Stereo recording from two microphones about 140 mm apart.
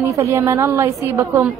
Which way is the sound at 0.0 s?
20° right (ahead or behind).